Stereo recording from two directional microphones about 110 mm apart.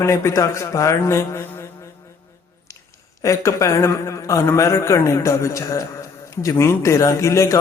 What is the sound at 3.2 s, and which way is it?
A man's voice, 30° left (ahead or behind).